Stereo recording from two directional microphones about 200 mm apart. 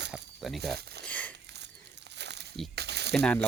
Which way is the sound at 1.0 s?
10° left (ahead or behind).